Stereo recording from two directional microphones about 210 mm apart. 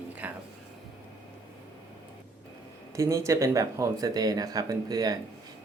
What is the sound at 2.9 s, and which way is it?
Speech, 15° right (ahead or behind).